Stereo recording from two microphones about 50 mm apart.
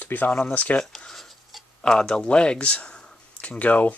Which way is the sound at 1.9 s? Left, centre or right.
Centre.